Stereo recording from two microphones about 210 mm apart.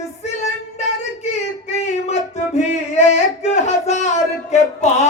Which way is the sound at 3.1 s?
30° left (ahead or behind).